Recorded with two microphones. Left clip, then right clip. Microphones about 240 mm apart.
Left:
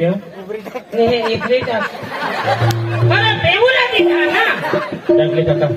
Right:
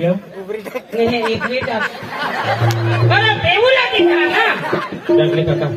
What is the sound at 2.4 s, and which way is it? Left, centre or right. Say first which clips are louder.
Speech: left 2 dB; left.